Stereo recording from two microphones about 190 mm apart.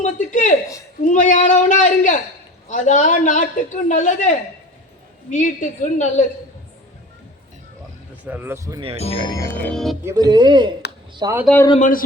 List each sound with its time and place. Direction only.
0.0 s a sound: 40° left (ahead or behind)
1.0 s a man's voice: 40° left (ahead or behind)
8.2 s speech: 10° right (ahead or behind)
9.0 s speech: 30° left (ahead or behind)
9.6 s music: centre (ahead or behind)
10.0 s speech: 15° right (ahead or behind)
11.8 s speech: 45° left (ahead or behind)